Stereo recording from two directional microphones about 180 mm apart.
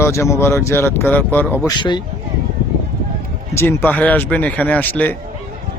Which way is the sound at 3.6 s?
15° left (ahead or behind).